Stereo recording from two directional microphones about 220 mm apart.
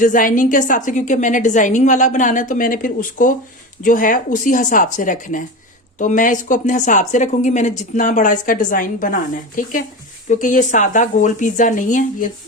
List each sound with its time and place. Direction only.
0.0 s a woman's voice: 35° left (ahead or behind)